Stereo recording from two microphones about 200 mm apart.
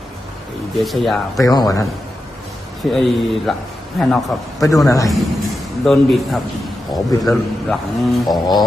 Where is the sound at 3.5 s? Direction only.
Centre (ahead or behind).